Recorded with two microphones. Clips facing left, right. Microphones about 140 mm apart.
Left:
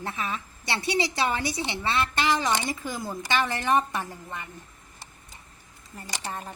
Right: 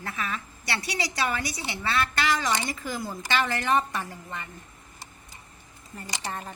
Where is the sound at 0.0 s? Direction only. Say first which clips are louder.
Left 1 dB; 25° left (ahead or behind).